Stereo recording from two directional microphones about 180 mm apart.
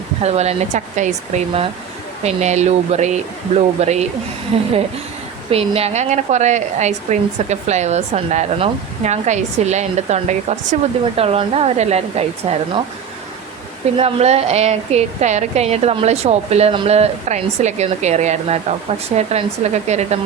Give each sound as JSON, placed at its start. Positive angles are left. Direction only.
{"t": 0.2, "sound": "a woman's voice", "side_deg": -35}
{"t": 13.9, "sound": "a woman's voice", "side_deg": -35}